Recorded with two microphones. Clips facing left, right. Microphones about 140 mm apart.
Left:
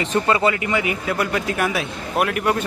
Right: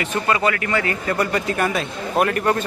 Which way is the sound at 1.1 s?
Centre (ahead or behind).